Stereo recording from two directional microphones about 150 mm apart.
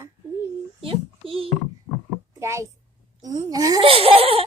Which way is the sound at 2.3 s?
20° right (ahead or behind).